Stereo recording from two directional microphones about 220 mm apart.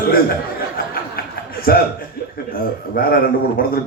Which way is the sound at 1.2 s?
45° left (ahead or behind).